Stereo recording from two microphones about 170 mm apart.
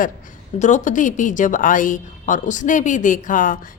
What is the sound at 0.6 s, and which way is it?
A woman's voice, 45° left (ahead or behind).